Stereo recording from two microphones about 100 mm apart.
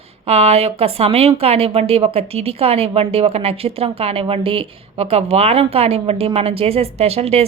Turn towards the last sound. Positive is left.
turn(degrees=-90)